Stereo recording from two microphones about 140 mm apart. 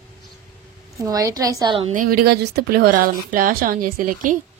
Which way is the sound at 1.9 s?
90° right.